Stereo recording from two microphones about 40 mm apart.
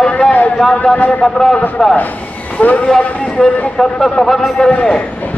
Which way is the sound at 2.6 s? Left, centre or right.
Left.